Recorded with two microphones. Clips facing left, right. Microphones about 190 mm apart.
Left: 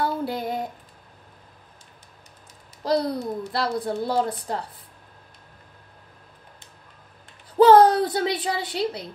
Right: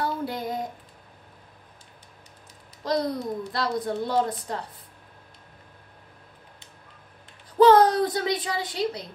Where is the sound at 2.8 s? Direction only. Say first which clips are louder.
Left 3 dB; 30° left (ahead or behind).